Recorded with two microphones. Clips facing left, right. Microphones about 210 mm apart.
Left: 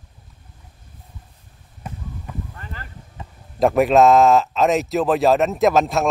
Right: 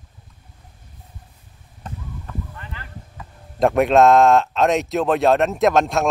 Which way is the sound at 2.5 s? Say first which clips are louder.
Left 1 dB; 40° left (ahead or behind).